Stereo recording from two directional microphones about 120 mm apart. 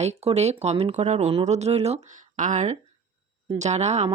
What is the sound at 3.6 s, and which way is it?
Speech, 70° right (ahead or behind).